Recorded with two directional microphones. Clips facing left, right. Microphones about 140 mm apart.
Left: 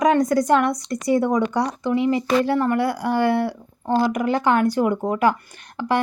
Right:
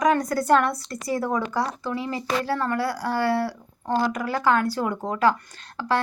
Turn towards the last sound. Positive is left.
turn(degrees=15)  # may be behind; listen again after turning